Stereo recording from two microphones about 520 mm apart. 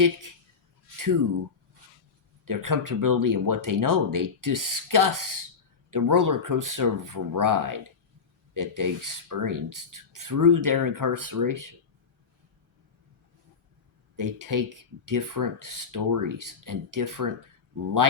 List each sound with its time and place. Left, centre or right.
0.0 s speech: right
2.4 s speech: right
14.2 s speech: right